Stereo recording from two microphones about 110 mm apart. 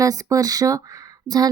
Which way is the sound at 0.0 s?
30° right (ahead or behind).